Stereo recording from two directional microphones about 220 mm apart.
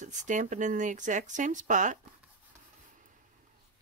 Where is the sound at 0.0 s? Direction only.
35° right (ahead or behind).